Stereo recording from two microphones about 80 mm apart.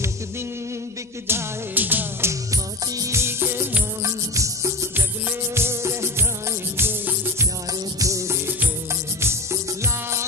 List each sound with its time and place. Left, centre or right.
1.2 s music: right
2.5 s music: right
4.0 s music: right
8.0 s music: right